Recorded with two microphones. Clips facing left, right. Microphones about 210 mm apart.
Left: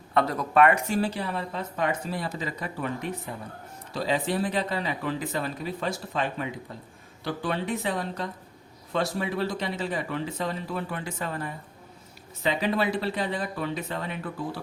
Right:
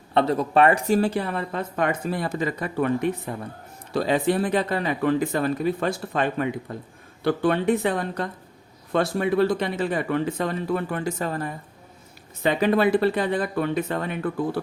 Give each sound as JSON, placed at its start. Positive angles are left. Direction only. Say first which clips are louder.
{"t": 0.1, "sound": "speech", "louder": "right 4 dB", "side_deg": -30}
{"t": 1.0, "sound": "speech", "louder": "right 5 dB", "side_deg": -50}
{"t": 12.4, "sound": "speech", "louder": "right 6 dB", "side_deg": -55}